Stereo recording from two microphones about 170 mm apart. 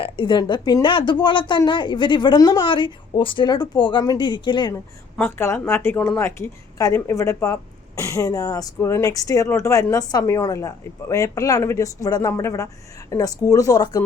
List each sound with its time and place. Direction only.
0.0 s a woman's voice: 25° left (ahead or behind)
5.1 s a woman's voice: 10° left (ahead or behind)